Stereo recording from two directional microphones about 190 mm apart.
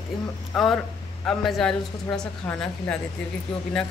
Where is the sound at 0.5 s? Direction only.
Centre (ahead or behind).